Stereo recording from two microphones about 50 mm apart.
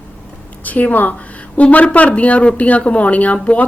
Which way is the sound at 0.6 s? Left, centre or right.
Left.